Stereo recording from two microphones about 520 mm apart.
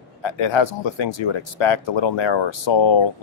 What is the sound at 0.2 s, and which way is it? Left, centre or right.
Speech, left.